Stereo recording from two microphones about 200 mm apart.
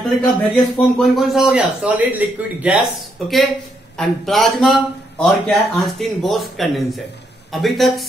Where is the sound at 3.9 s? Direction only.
Centre (ahead or behind).